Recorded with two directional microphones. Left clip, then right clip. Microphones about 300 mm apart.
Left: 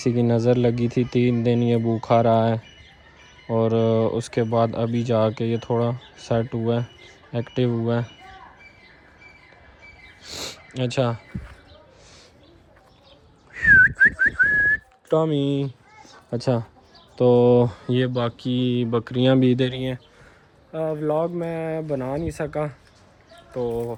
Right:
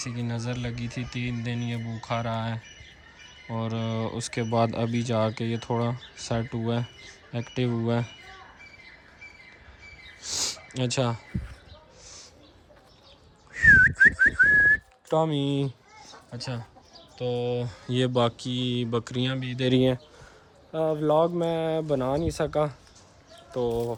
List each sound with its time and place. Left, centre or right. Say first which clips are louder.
0.0 s speech: left 14 dB; centre
3.6 s speech: left 12 dB; centre
10.2 s speech: right 3 dB; centre
13.5 s speech: left 2 dB; centre
16.3 s speech: left 14 dB; centre
19.7 s speech: right 6 dB; right
20.7 s speech: right 1 dB; centre